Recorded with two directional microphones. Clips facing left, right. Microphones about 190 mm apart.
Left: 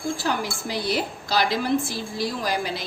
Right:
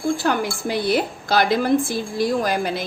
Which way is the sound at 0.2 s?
55° right (ahead or behind).